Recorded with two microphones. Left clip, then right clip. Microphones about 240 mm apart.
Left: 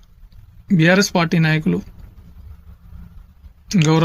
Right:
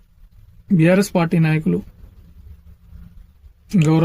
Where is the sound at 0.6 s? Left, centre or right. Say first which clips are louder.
Left 1 dB; centre.